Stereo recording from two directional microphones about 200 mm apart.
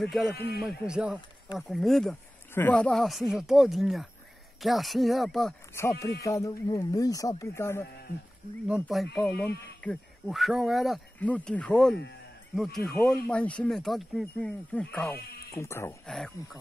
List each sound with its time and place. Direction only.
0.0 s speech: centre (ahead or behind)
0.3 s speech: 50° left (ahead or behind)
0.6 s speech: 5° right (ahead or behind)
5.8 s speech: 15° left (ahead or behind)
8.8 s speech: centre (ahead or behind)
15.1 s speech: 50° left (ahead or behind)
15.5 s speech: 15° left (ahead or behind)